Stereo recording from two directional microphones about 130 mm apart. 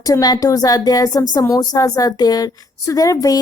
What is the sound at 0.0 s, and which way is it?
A woman's voice, 30° left (ahead or behind).